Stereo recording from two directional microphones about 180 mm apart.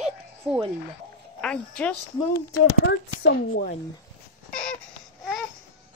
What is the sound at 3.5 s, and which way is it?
Speech, 55° left (ahead or behind).